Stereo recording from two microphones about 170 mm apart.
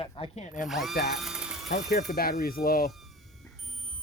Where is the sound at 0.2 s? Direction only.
45° left (ahead or behind).